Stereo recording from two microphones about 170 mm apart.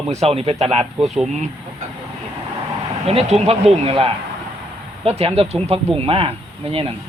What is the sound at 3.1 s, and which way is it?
Speech, 35° right (ahead or behind).